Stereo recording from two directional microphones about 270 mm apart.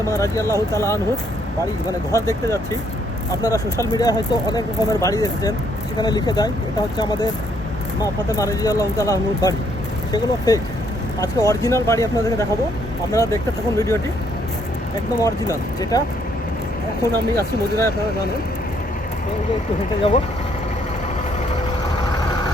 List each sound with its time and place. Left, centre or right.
0.1 s speech: centre
15.2 s speech: centre
17.3 s speech: centre